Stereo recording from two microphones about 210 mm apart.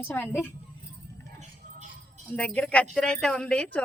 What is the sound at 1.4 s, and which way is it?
Music, 35° right (ahead or behind).